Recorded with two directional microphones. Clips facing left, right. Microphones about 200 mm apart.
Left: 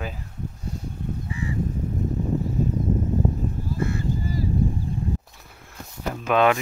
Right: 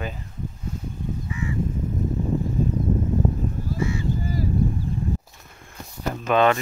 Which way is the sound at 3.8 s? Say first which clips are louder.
Right 1 dB; 55° left (ahead or behind).